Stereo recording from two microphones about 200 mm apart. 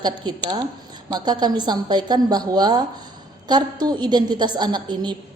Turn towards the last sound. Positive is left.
turn(degrees=-20)  # may be behind; listen again after turning